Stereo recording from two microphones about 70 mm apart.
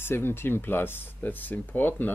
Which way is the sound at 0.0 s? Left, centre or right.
Left.